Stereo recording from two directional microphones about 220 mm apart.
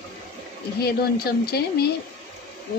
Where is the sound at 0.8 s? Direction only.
45° left (ahead or behind).